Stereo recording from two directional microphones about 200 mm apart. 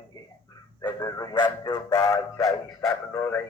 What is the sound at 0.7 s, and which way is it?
Dog, 20° left (ahead or behind).